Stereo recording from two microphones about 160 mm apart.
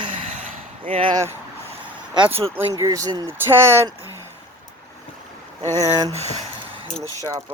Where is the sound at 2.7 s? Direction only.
20° right (ahead or behind).